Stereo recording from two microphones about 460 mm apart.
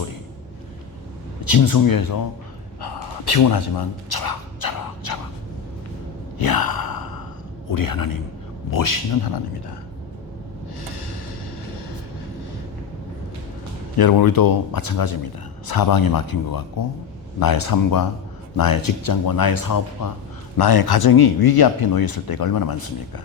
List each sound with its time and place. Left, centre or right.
1.5 s speech: left
2.8 s a sound: left
6.4 s sigh: left
7.7 s speech: left
10.8 s music: left
13.9 s speech: left